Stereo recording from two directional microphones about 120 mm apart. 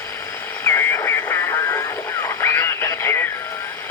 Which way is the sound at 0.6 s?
20° left (ahead or behind).